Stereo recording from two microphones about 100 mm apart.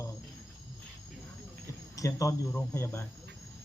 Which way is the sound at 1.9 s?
35° left (ahead or behind).